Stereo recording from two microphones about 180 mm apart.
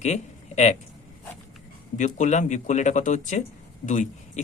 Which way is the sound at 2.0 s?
45° left (ahead or behind).